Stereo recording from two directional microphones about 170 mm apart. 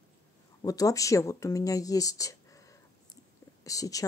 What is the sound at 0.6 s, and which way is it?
Speech, 20° left (ahead or behind).